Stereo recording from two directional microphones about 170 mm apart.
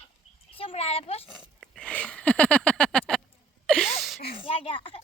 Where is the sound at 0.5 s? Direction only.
35° left (ahead or behind).